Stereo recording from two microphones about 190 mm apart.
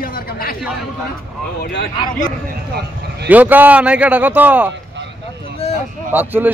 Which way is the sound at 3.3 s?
10° right (ahead or behind).